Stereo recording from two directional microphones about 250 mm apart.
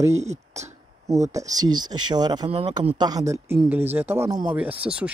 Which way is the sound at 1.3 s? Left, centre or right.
Centre.